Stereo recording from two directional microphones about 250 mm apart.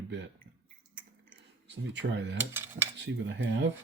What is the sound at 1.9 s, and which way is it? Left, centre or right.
Speech, right.